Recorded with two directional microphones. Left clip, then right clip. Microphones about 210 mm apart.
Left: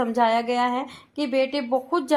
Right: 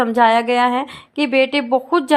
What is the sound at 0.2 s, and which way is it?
A woman's voice, 20° right (ahead or behind).